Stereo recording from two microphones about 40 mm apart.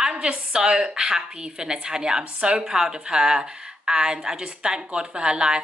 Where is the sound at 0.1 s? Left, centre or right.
Right.